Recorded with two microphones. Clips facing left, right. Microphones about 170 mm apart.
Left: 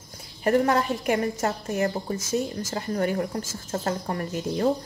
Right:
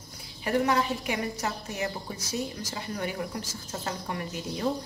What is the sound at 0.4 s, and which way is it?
A woman's voice, 45° left (ahead or behind).